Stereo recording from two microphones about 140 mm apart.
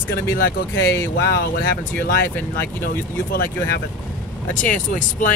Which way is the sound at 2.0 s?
90° left.